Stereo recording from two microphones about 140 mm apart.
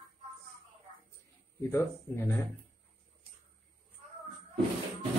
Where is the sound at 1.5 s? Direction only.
20° left (ahead or behind).